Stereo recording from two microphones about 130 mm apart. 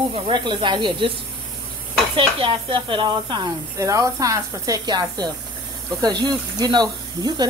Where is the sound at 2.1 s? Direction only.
40° right (ahead or behind).